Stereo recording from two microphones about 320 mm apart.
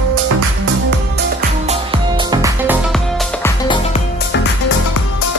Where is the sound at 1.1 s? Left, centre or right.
Right.